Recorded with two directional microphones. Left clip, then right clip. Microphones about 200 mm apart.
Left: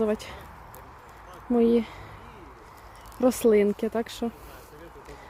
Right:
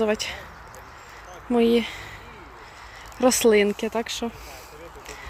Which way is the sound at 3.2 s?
5° left (ahead or behind).